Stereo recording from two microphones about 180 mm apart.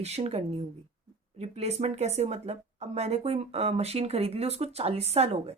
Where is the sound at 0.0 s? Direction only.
35° right (ahead or behind).